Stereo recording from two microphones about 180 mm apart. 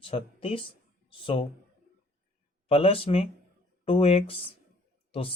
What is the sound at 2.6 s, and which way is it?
Speech, 30° left (ahead or behind).